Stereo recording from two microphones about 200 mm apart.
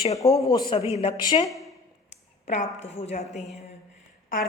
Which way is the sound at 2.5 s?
35° left (ahead or behind).